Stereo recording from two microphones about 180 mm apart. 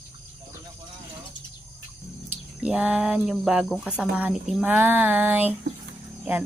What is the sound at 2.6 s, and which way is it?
Speech, 5° right (ahead or behind).